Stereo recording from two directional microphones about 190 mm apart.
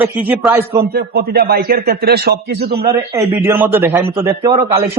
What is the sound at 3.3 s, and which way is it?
A man's voice, 10° right (ahead or behind).